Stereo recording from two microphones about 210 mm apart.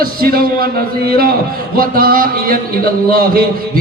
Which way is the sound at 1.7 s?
45° right (ahead or behind).